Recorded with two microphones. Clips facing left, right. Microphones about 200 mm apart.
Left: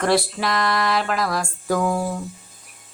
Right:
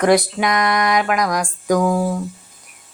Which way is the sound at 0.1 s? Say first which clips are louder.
Right 5 dB; 15° right (ahead or behind).